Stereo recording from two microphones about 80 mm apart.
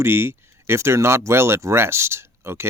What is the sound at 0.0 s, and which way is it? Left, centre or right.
Speech, right.